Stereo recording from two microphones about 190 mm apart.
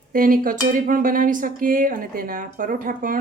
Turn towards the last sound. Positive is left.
turn(degrees=-45)  # may be behind; listen again after turning